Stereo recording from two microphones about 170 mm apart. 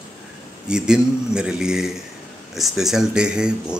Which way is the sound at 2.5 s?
Centre (ahead or behind).